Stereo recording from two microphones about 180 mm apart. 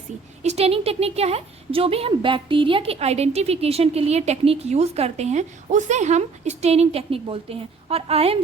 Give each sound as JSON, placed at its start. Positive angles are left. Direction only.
{"t": 0.4, "sound": "a woman's voice", "side_deg": -35}